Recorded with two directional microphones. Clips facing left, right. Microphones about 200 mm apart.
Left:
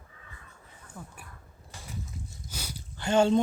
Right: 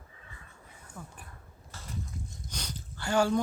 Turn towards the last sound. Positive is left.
turn(degrees=20)  # may be behind; listen again after turning